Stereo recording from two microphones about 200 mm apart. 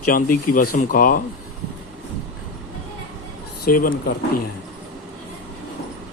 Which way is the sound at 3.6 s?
45° left (ahead or behind).